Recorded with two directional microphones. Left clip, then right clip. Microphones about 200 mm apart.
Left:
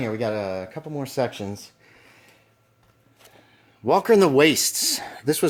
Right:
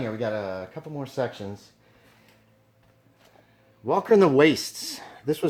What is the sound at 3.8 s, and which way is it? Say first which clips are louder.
Speech: left 2 dB; 45° left (ahead or behind).